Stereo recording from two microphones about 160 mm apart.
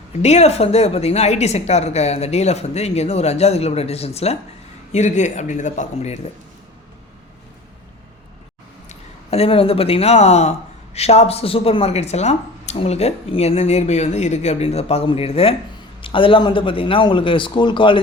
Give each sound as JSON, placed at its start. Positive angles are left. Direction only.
{"t": 0.2, "sound": "speech", "side_deg": 45}
{"t": 8.9, "sound": "speech", "side_deg": 40}